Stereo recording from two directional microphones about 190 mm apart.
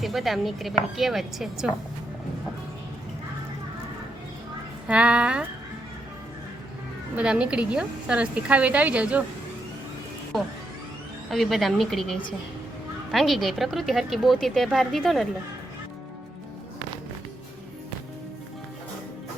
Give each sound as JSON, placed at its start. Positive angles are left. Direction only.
{"t": 0.0, "sound": "speech", "side_deg": 0}
{"t": 4.9, "sound": "speech", "side_deg": -5}
{"t": 7.2, "sound": "speech", "side_deg": -5}
{"t": 10.3, "sound": "speech", "side_deg": 0}